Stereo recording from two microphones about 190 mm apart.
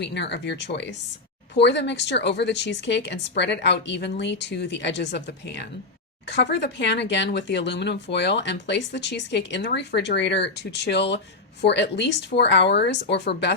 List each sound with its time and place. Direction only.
0.0 s speech: 65° left (ahead or behind)